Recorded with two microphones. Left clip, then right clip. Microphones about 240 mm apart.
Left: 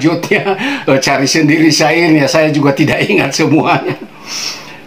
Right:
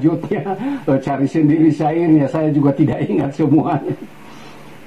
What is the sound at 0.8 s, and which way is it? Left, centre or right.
Speech, centre.